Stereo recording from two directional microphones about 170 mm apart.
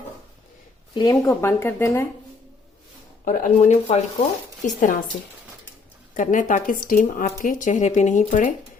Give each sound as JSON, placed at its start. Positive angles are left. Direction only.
{"t": 0.9, "sound": "speech", "side_deg": 20}
{"t": 3.2, "sound": "speech", "side_deg": 50}
{"t": 4.6, "sound": "speech", "side_deg": 50}
{"t": 6.1, "sound": "speech", "side_deg": 50}